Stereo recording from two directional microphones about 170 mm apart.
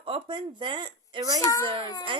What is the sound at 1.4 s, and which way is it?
Speech, 20° left (ahead or behind).